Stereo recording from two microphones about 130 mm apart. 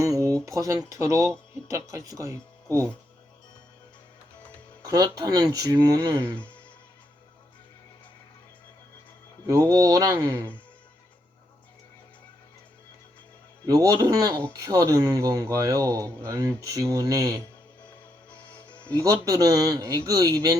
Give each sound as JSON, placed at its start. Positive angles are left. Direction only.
{"t": 0.0, "sound": "a sound", "side_deg": -25}
{"t": 0.4, "sound": "speech", "side_deg": -25}
{"t": 4.8, "sound": "speech", "side_deg": -30}
{"t": 6.3, "sound": "speech", "side_deg": 10}
{"t": 9.5, "sound": "speech", "side_deg": -25}
{"t": 13.7, "sound": "speech", "side_deg": -25}
{"t": 18.6, "sound": "music", "side_deg": 10}
{"t": 18.9, "sound": "speech", "side_deg": -25}